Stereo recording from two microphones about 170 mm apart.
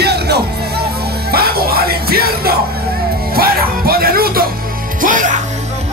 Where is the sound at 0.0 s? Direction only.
70° right (ahead or behind).